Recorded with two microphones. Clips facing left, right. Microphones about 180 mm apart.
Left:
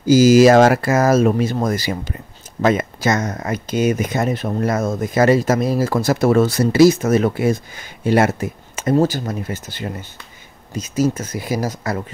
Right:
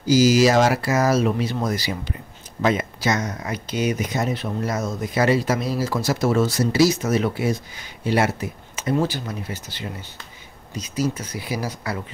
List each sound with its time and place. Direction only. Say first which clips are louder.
0.0 s speech: left 6 dB; 50° left (ahead or behind)